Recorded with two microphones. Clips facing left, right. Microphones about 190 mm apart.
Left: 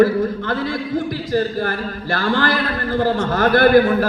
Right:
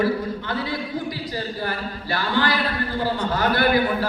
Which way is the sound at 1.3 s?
50° left (ahead or behind).